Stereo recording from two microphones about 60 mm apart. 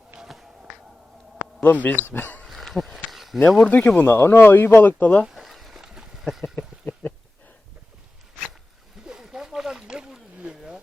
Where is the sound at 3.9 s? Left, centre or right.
Left.